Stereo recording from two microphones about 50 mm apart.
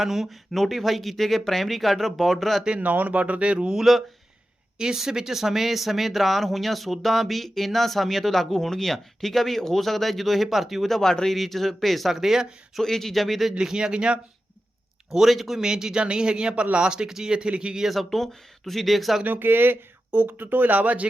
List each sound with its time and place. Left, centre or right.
0.0 s speech: centre
2.6 s speech: right
3.8 s speech: centre
4.8 s speech: centre
12.8 s speech: centre
13.5 s a man's voice: centre
15.1 s a man's voice: centre
17.8 s speech: centre
19.2 s speech: right